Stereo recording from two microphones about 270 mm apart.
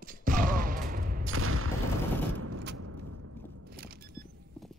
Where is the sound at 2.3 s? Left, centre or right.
Right.